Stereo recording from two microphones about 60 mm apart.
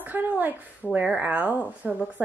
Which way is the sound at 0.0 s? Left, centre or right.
Right.